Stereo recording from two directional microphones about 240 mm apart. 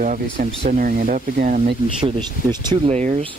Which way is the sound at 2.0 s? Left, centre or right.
Centre.